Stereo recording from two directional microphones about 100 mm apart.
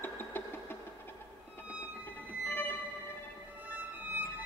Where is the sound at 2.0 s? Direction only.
20° left (ahead or behind).